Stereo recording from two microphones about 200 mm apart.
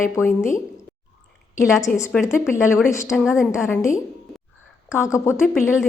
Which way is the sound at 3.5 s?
15° left (ahead or behind).